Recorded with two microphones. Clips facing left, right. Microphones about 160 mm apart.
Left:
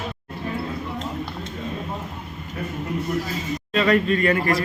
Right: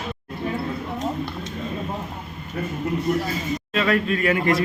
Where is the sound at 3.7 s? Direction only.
Centre (ahead or behind).